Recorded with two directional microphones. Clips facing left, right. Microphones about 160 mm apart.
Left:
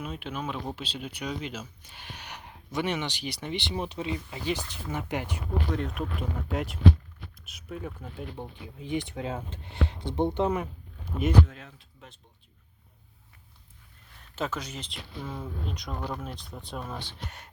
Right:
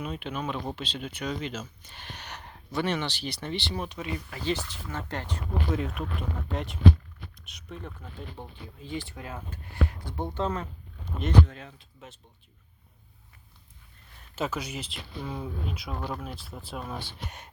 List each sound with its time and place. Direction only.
0.0 s speech: 5° left (ahead or behind); by 4.4 s 25° left (ahead or behind)
4.4 s speech: 15° left (ahead or behind)
5.7 s speech: centre (ahead or behind)
8.4 s speech: 15° left (ahead or behind); by 12.2 s 5° right (ahead or behind)
14.3 s speech: 5° right (ahead or behind)